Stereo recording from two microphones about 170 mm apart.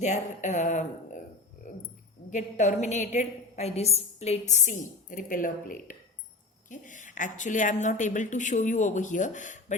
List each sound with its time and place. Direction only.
0.0 s a woman's voice: 45° left (ahead or behind)
2.3 s a woman's voice: 45° left (ahead or behind)